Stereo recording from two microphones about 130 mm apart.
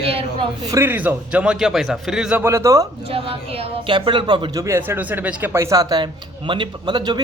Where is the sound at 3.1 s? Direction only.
45° right (ahead or behind).